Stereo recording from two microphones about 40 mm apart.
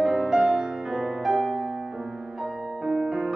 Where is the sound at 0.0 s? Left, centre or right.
Centre.